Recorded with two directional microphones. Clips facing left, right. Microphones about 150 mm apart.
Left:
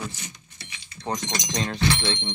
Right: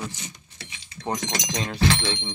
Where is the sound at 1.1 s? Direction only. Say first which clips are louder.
Right 1 dB; 90° right.